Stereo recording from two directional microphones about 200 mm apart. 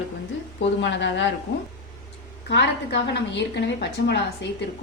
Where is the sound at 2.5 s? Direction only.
60° left (ahead or behind).